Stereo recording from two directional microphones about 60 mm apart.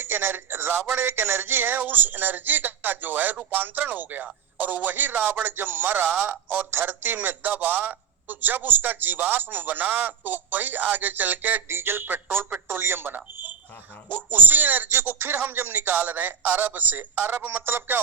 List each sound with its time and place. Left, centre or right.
0.0 s a man's voice: right